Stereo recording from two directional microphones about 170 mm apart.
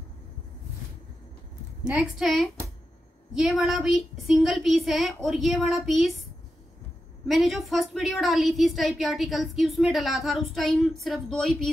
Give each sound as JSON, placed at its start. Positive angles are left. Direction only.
{"t": 1.9, "sound": "a woman's voice", "side_deg": -5}
{"t": 7.2, "sound": "a woman's voice", "side_deg": 0}